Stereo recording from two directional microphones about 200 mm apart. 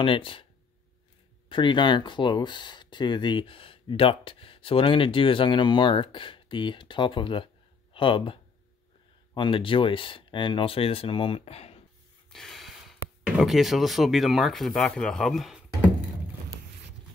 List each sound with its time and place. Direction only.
0.0 s speech: 25° left (ahead or behind)
1.5 s speech: 25° left (ahead or behind)
12.3 s speech: centre (ahead or behind)